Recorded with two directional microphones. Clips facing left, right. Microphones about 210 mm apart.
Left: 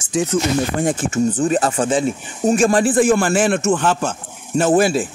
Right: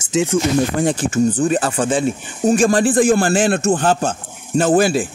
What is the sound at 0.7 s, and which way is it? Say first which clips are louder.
Speech: right 2 dB; 35° right (ahead or behind).